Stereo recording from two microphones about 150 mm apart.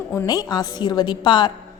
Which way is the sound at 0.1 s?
20° left (ahead or behind).